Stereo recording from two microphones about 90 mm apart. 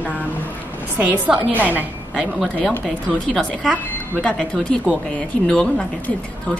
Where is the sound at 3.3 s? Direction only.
10° left (ahead or behind).